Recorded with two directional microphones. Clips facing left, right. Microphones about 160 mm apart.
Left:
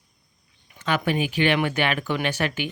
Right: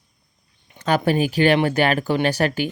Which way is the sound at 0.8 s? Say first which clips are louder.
Right 5 dB; 40° right (ahead or behind).